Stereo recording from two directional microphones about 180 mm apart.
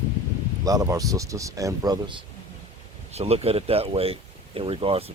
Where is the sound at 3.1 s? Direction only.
35° right (ahead or behind).